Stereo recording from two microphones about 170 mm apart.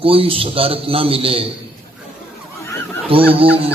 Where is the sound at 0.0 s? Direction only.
35° right (ahead or behind).